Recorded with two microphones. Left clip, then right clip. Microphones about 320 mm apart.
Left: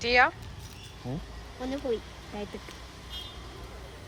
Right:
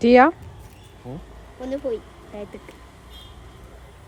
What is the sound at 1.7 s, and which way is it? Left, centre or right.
Speech, centre.